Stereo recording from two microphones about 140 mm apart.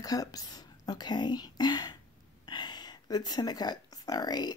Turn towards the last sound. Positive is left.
turn(degrees=30)  # may be behind; listen again after turning